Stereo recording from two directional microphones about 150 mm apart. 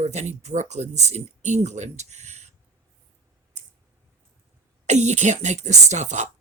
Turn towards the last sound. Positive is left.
turn(degrees=-50)  # may be behind; listen again after turning